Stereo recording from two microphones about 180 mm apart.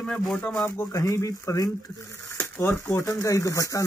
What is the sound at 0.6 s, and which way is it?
Speech, 15° left (ahead or behind).